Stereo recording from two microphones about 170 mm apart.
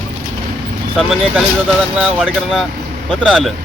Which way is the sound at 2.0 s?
5° right (ahead or behind).